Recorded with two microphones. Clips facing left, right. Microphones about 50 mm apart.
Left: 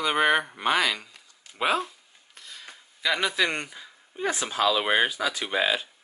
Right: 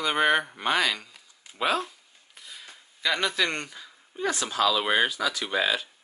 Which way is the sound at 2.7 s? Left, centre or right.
Centre.